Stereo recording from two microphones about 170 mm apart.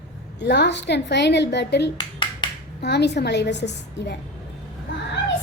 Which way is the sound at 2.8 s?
75° left (ahead or behind).